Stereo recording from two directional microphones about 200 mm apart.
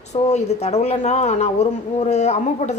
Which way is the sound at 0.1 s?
35° left (ahead or behind).